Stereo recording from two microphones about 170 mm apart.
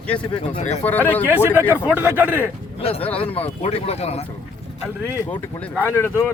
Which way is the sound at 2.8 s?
35° left (ahead or behind).